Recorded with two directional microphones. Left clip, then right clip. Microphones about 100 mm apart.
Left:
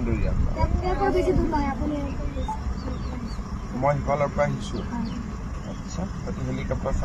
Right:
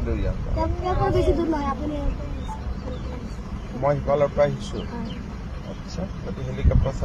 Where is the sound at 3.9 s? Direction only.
30° right (ahead or behind).